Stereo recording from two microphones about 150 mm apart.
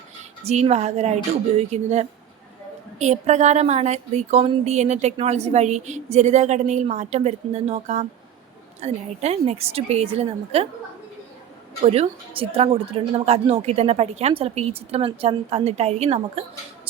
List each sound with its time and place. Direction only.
0.4 s speech: 45° right (ahead or behind)
11.8 s speech: 45° right (ahead or behind)